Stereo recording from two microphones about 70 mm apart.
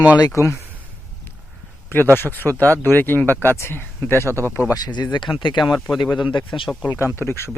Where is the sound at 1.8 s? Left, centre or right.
Left.